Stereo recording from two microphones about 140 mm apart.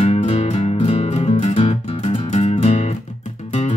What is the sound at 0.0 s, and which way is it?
Music, 45° left (ahead or behind).